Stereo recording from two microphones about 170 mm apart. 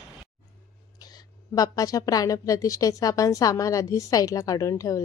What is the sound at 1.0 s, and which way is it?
A woman's voice, 20° left (ahead or behind).